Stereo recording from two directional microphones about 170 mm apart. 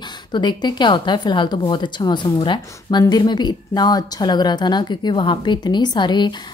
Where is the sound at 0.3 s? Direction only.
25° left (ahead or behind).